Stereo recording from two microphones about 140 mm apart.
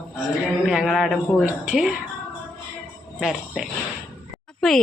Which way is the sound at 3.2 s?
Centre (ahead or behind).